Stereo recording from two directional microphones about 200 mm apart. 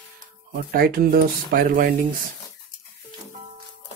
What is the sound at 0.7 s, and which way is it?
Speech, 50° right (ahead or behind).